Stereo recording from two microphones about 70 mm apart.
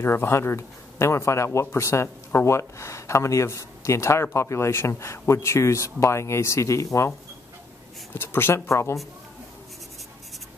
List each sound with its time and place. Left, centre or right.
0.0 s speech: left
8.1 s speech: left